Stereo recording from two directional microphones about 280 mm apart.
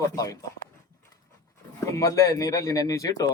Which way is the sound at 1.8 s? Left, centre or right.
Centre.